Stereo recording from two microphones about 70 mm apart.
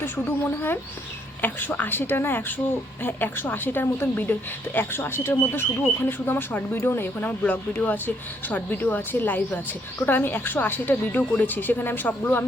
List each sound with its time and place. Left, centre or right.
0.0 s speech: left